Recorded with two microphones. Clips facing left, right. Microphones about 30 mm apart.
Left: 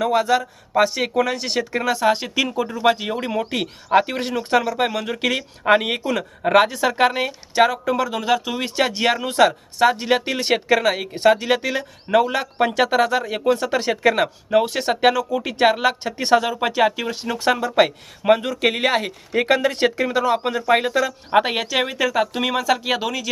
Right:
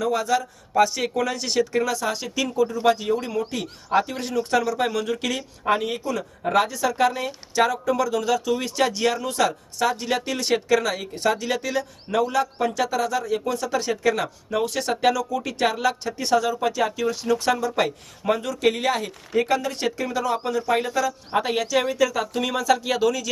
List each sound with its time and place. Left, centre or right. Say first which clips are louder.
0.0 s speech: left 4 dB; left
7.3 s speech: left 4 dB; left
12.2 s speech: left 2 dB; left
19.3 s speech: left 4 dB; left